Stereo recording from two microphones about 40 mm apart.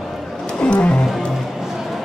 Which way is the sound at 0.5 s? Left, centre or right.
Left.